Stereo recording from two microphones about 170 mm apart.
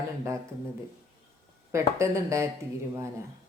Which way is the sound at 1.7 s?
15° right (ahead or behind).